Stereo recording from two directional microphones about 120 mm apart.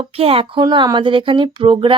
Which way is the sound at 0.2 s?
50° right (ahead or behind).